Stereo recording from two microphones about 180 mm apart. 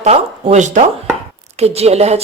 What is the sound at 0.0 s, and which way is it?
Speech, 40° right (ahead or behind).